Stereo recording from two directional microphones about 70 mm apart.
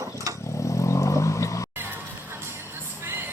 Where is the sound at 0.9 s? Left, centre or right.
Left.